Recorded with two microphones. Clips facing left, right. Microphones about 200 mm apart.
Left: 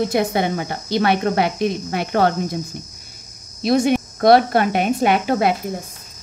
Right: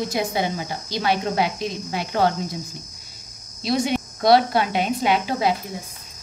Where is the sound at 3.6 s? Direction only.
50° left (ahead or behind).